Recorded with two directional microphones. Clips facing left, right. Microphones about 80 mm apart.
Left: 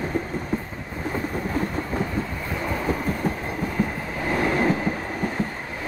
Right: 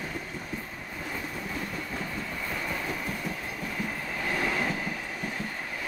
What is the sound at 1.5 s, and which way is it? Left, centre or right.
Train, left.